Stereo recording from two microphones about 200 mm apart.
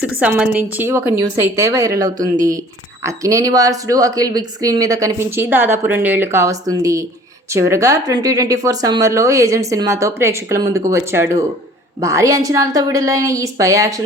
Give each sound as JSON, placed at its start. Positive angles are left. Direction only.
{"t": 0.2, "sound": "speech", "side_deg": -5}